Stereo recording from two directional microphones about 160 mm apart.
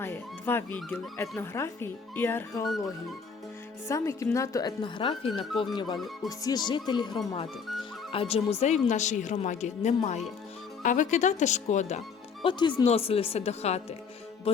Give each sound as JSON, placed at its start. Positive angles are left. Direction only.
{"t": 0.0, "sound": "speech", "side_deg": 15}
{"t": 3.8, "sound": "speech", "side_deg": 20}